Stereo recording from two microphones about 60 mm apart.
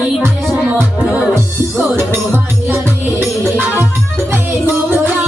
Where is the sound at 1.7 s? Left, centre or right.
Right.